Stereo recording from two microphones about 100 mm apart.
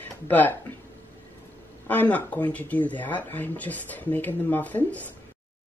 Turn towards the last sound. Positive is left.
turn(degrees=15)  # may be behind; listen again after turning